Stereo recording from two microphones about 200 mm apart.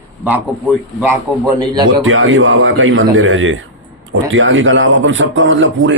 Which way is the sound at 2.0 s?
90° right.